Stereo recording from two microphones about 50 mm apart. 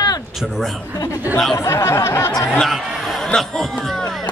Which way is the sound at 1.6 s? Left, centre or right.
Left.